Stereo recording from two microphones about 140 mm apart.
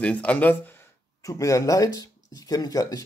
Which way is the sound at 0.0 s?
10° left (ahead or behind).